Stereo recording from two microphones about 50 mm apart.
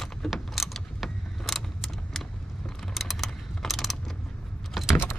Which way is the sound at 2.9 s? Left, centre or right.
Centre.